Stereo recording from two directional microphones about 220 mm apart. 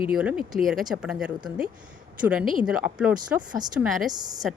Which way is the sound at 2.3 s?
5° right (ahead or behind).